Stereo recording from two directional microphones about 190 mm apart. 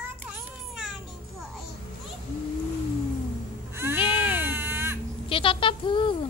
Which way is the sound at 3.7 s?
15° right (ahead or behind).